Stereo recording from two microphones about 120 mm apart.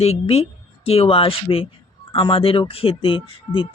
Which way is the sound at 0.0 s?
60° left (ahead or behind).